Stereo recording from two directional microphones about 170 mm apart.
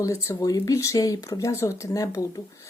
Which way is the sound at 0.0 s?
15° left (ahead or behind).